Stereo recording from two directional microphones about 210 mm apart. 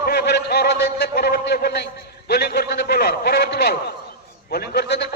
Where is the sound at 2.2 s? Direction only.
50° left (ahead or behind).